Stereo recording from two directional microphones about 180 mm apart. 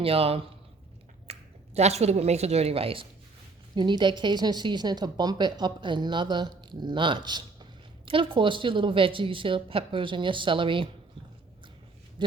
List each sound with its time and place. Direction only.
0.0 s a man's voice: 35° right (ahead or behind)